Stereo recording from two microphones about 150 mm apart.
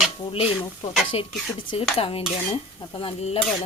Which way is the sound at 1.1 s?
40° left (ahead or behind).